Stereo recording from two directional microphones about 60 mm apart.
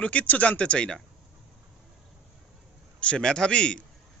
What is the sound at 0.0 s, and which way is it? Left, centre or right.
Speech, left.